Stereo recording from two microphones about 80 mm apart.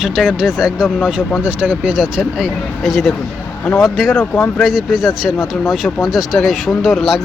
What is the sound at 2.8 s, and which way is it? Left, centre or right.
Speech, centre.